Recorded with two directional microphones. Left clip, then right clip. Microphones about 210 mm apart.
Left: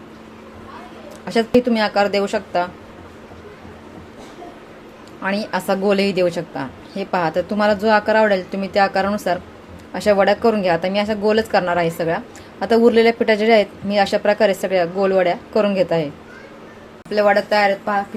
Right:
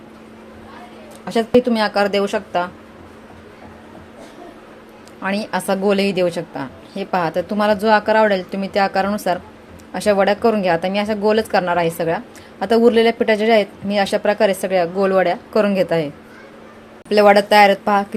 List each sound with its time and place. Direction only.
1.2 s a woman's voice: 5° right (ahead or behind)
5.2 s a woman's voice: 10° right (ahead or behind)
17.1 s speech: 35° right (ahead or behind)